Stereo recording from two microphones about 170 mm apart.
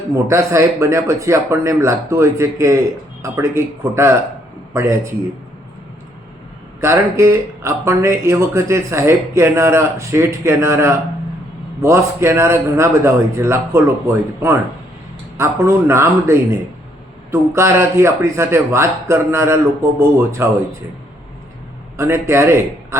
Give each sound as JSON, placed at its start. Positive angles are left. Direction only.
{"t": 0.3, "sound": "a man's voice", "side_deg": -15}
{"t": 6.8, "sound": "speech", "side_deg": -15}
{"t": 21.9, "sound": "speech", "side_deg": -15}